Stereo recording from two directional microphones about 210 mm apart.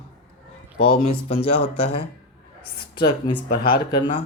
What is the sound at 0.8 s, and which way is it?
Speech, 30° left (ahead or behind).